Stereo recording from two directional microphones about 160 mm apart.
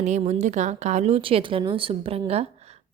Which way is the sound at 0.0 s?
45° right (ahead or behind).